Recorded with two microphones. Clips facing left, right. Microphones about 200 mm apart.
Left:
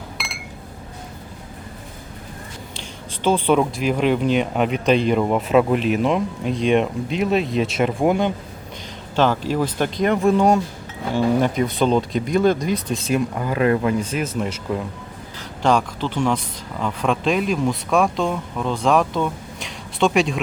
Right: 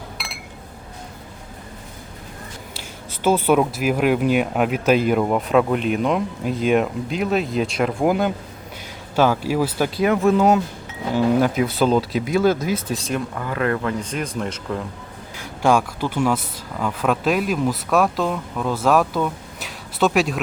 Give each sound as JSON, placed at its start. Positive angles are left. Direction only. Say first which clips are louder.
{"t": 3.2, "sound": "speech", "louder": "right 1 dB", "side_deg": -5}
{"t": 13.3, "sound": "speech", "louder": "left 4 dB", "side_deg": 20}
{"t": 14.0, "sound": "speech", "louder": "left 2 dB", "side_deg": 5}
{"t": 15.4, "sound": "speech", "louder": "right 1 dB", "side_deg": -10}